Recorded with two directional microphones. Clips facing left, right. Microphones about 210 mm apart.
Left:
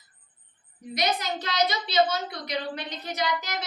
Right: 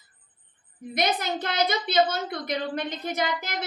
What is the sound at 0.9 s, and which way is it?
A woman's voice, 55° right (ahead or behind).